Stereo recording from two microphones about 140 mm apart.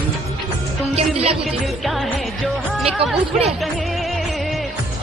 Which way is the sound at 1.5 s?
Centre (ahead or behind).